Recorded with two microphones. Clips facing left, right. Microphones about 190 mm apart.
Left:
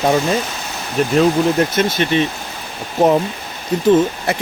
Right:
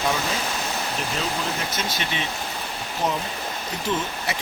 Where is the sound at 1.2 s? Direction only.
60° left (ahead or behind).